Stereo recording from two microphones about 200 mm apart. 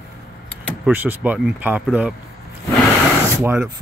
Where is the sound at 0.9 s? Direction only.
10° right (ahead or behind).